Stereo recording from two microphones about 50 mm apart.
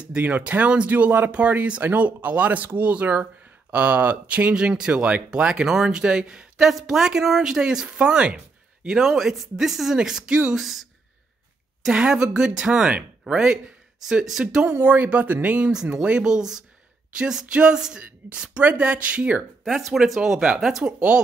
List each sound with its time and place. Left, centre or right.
0.0 s speech: right
4.6 s speech: centre
8.8 s speech: centre
10.5 s speech: centre
11.9 s speech: centre
14.7 s speech: right
19.6 s speech: centre
20.8 s speech: right